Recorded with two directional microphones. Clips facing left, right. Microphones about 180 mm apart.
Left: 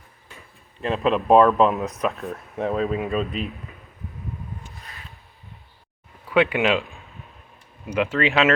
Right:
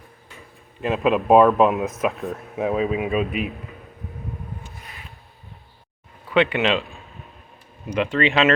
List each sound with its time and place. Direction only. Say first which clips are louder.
0.8 s speech: right 2 dB; 5° right (ahead or behind)
2.0 s speech: right 1 dB; 15° right (ahead or behind)
2.6 s speech: right 2 dB; 5° right (ahead or behind)
6.3 s speech: even; 10° left (ahead or behind)
7.9 s speech: right 1 dB; 5° left (ahead or behind)